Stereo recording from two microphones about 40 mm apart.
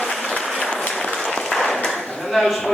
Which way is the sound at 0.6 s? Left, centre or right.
Centre.